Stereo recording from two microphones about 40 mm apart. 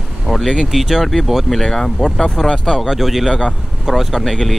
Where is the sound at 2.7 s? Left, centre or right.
Centre.